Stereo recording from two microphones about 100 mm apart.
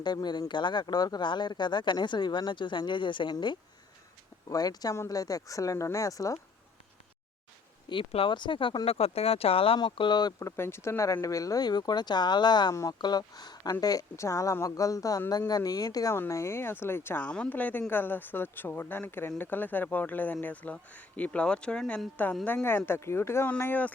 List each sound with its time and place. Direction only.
0.0 s speech: 45° left (ahead or behind)
4.4 s speech: 40° left (ahead or behind)
7.9 s speech: 65° left (ahead or behind)
9.7 s speech: 55° left (ahead or behind)
10.4 s speech: 25° left (ahead or behind); by 12.7 s 45° left (ahead or behind)
12.7 s speech: 30° left (ahead or behind)
13.0 s speech: 45° left (ahead or behind)
16.1 s a woman's voice: 25° left (ahead or behind)